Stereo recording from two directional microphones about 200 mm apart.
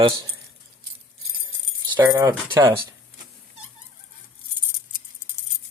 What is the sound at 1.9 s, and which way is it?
Speech, 15° right (ahead or behind).